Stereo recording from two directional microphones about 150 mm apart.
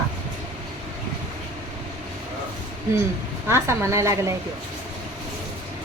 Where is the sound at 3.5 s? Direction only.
20° right (ahead or behind).